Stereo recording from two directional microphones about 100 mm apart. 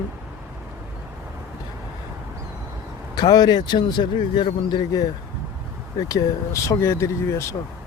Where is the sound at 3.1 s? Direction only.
40° left (ahead or behind).